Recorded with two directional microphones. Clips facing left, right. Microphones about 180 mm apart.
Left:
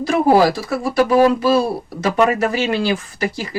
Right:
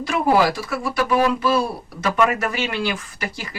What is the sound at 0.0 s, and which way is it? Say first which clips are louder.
Speech: left 5 dB; 35° left (ahead or behind).